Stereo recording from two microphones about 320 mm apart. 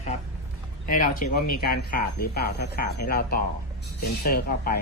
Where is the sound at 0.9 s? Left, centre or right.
Left.